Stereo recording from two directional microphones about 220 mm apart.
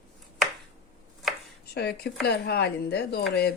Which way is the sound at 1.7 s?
50° left (ahead or behind).